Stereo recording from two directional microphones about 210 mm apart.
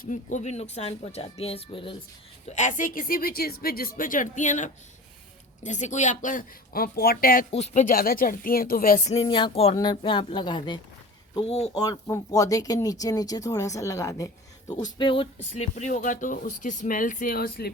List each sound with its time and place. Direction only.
0.0 s speech: 35° left (ahead or behind)
2.5 s speech: 35° left (ahead or behind)
7.5 s speech: 35° left (ahead or behind)
9.1 s speech: 25° left (ahead or behind)
11.7 s speech: 15° left (ahead or behind); by 17.7 s 45° left (ahead or behind)